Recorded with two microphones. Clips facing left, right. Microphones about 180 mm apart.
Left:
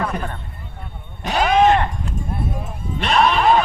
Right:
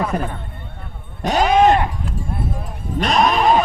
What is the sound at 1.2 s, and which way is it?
Sheep, 40° right (ahead or behind).